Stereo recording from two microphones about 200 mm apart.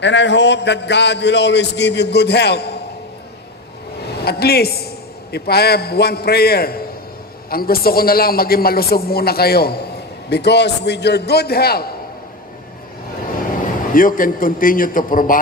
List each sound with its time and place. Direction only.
0.0 s a man's voice: 60° left (ahead or behind)
4.2 s a man's voice: 50° left (ahead or behind)
13.9 s a man's voice: 45° left (ahead or behind)